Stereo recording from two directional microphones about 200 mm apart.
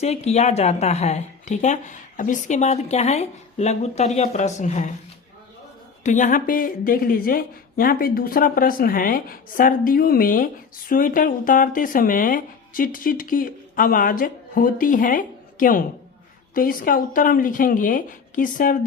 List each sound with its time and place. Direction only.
0.0 s a woman's voice: 30° left (ahead or behind)
6.0 s speech: 40° left (ahead or behind)